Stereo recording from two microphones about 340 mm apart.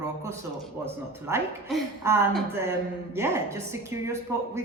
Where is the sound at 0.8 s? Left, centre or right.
Centre.